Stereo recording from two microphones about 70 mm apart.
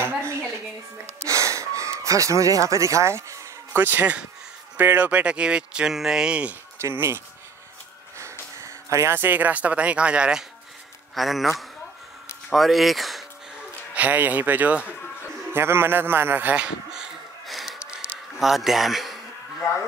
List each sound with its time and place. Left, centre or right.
1.2 s a sound: right
3.7 s speech: right
5.2 s speech: centre
6.8 s speech: right
8.2 s music: right
8.9 s speech: right; by 10.4 s centre
11.1 s speech: centre
13.9 s speech: right
15.5 s a sound: right; by 18.0 s centre
18.4 s speech: centre